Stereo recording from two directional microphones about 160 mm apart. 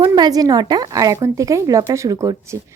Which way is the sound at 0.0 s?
25° right (ahead or behind).